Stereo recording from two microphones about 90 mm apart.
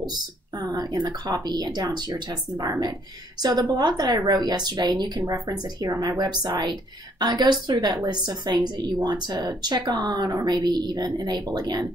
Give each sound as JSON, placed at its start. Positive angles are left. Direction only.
{"t": 0.6, "sound": "a woman's voice", "side_deg": -50}